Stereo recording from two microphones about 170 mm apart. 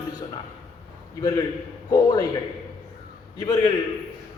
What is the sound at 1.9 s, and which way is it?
Speech, 20° left (ahead or behind).